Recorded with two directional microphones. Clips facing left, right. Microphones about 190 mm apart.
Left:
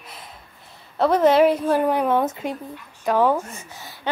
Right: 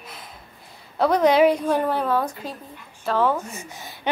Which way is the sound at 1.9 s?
20° left (ahead or behind).